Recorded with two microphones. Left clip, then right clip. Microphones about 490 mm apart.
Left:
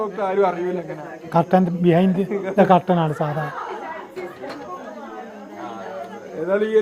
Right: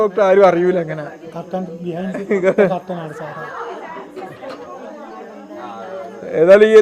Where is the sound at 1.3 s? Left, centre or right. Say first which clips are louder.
Left 10 dB; left.